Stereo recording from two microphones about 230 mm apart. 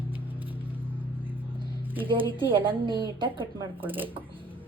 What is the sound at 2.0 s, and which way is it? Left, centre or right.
A woman's voice, right.